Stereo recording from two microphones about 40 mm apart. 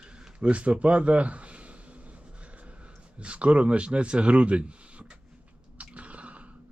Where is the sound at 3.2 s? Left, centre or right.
Right.